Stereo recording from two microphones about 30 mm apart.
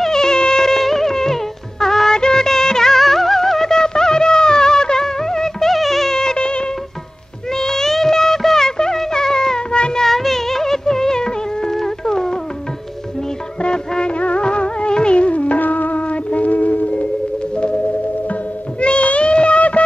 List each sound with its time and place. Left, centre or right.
0.0 s music: centre
3.0 s music: centre
5.7 s music: centre
6.1 s music: left
7.5 s music of bollywood: centre
8.6 s music: left
9.9 s music of bollywood: centre
13.6 s music: left
15.6 s music: left
16.1 s music: left
18.8 s a sound: left